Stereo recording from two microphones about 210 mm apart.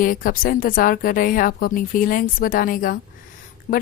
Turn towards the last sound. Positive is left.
turn(degrees=40)  # may be behind; listen again after turning